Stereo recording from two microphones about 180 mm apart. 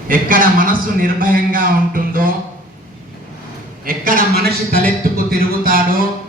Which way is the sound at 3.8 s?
50° right (ahead or behind).